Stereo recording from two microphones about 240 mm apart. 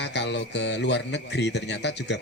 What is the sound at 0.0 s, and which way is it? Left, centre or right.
A man's voice, left.